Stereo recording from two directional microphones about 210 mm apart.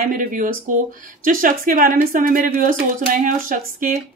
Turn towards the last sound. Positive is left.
turn(degrees=-40)  # may be behind; listen again after turning